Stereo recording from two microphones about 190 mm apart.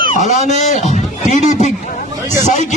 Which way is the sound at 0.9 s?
35° left (ahead or behind).